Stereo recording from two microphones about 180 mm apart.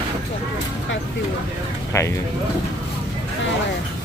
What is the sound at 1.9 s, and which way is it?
Speech, 15° left (ahead or behind).